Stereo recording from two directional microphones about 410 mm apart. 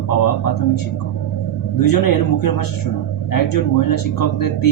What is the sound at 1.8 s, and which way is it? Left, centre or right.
Speech, left.